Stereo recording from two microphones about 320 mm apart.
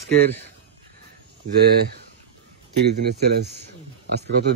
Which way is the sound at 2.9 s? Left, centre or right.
Right.